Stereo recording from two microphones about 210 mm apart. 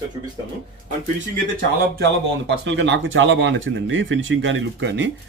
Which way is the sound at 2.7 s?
60° right (ahead or behind).